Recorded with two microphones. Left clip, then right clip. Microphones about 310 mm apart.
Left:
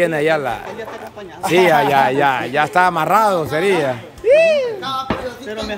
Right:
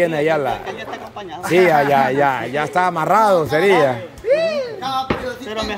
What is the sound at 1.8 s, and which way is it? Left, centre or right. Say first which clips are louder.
Speech: left 1 dB; centre.